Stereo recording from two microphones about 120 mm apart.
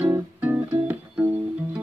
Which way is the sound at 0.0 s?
15° right (ahead or behind).